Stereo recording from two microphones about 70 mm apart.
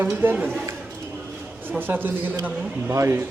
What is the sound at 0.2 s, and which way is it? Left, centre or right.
Speech, right.